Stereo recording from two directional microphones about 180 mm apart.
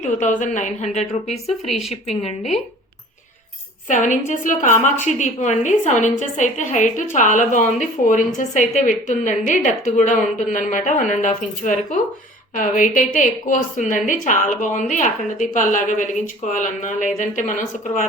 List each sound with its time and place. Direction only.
0.0 s a woman's voice: 45° left (ahead or behind)
3.8 s a woman's voice: 45° left (ahead or behind)